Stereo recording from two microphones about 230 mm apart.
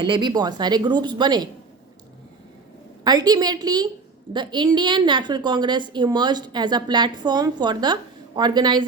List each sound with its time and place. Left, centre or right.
0.0 s a woman's voice: centre
3.0 s a woman's voice: centre